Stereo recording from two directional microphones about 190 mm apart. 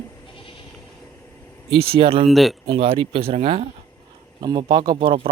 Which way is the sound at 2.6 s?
30° right (ahead or behind).